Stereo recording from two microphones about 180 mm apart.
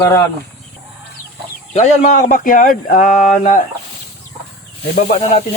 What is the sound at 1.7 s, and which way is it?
A man's voice, 40° left (ahead or behind).